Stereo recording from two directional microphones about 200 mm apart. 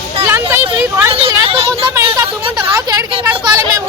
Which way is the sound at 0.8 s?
10° right (ahead or behind).